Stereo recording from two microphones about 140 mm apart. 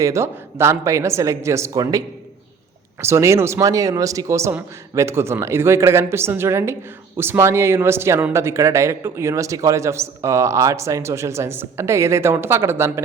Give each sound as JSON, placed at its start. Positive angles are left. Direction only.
{"t": 0.0, "sound": "speech", "side_deg": -20}